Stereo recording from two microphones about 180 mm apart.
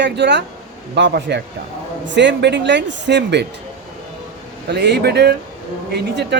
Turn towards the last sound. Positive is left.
turn(degrees=-65)  # may be behind; listen again after turning